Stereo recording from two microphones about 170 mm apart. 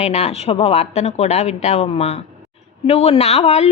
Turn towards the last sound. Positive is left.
turn(degrees=40)  # may be behind; listen again after turning